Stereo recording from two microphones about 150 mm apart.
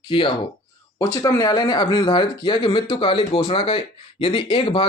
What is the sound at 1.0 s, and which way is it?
Speech, 20° left (ahead or behind).